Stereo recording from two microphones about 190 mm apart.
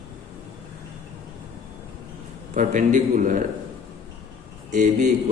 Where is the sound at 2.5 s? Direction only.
40° right (ahead or behind).